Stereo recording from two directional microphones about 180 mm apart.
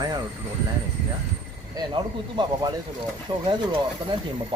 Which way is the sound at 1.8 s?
25° right (ahead or behind).